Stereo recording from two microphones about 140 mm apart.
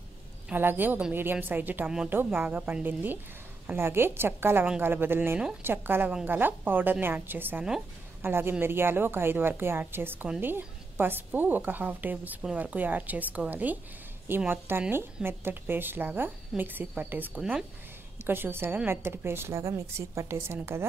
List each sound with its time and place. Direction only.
0.5 s a woman's voice: 15° right (ahead or behind)
18.2 s a woman's voice: 15° right (ahead or behind)